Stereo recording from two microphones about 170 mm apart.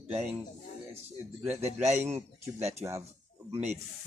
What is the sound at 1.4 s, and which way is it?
Speech, 15° right (ahead or behind).